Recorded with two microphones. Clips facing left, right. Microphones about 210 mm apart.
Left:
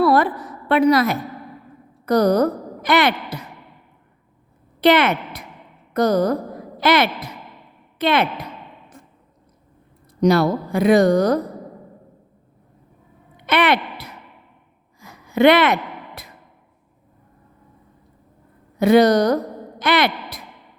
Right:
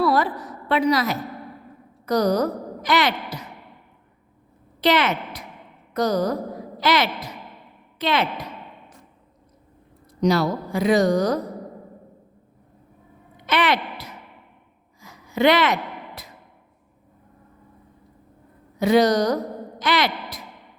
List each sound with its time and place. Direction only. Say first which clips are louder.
0.0 s a sound: left 4 dB; 55° left (ahead or behind)
0.7 s a woman's voice: left 5 dB; 55° left (ahead or behind)
4.8 s a woman's voice: left 5 dB; 55° left (ahead or behind)
10.2 s a woman's voice: left 4 dB; 55° left (ahead or behind)
13.3 s a sound: left 3 dB; 60° left (ahead or behind)
18.8 s a woman's voice: left 4 dB; 55° left (ahead or behind)